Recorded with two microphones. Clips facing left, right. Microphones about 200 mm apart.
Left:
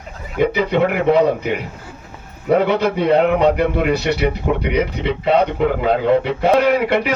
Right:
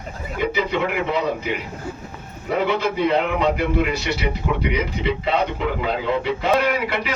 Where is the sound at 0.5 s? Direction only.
60° left (ahead or behind).